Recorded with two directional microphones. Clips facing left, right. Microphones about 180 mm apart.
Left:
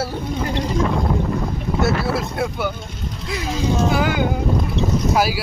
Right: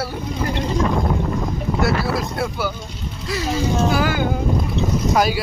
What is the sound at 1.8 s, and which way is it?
Speech, 25° left (ahead or behind).